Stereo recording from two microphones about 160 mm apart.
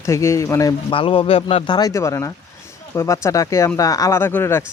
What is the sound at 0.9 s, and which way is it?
Speech, 35° left (ahead or behind).